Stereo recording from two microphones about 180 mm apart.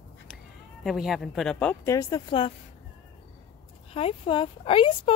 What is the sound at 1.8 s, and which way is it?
Speech, 20° left (ahead or behind).